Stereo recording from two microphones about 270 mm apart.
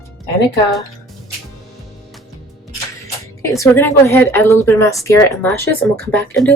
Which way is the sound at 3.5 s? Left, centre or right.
Centre.